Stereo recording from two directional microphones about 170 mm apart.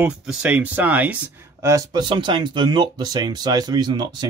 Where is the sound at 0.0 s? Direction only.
5° right (ahead or behind).